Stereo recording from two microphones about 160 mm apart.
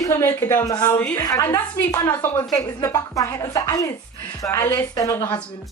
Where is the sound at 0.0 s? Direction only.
15° left (ahead or behind).